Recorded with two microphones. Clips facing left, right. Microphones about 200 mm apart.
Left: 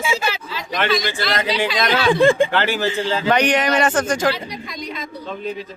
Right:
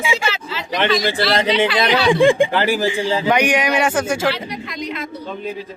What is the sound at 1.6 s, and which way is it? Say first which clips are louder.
Speech: right 3 dB; 15° right (ahead or behind).